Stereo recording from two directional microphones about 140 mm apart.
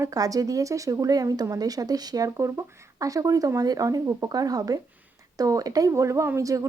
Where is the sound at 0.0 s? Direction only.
25° right (ahead or behind).